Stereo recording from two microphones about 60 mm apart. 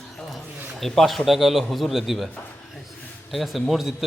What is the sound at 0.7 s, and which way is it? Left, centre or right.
A man's voice, centre.